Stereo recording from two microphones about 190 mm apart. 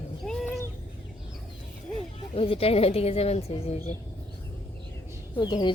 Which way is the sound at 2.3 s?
30° left (ahead or behind).